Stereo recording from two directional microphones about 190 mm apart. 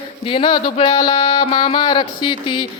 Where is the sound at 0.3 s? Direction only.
25° left (ahead or behind).